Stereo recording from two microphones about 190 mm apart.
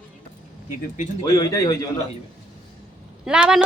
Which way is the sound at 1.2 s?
20° left (ahead or behind).